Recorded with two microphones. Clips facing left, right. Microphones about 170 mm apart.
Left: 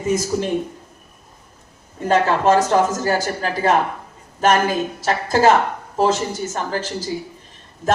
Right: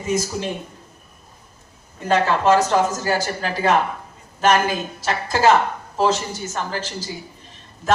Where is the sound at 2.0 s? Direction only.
45° left (ahead or behind).